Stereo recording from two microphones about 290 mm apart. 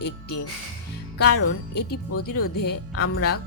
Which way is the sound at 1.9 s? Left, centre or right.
Left.